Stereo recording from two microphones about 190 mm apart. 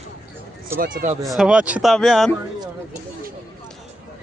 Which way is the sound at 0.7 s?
45° right (ahead or behind).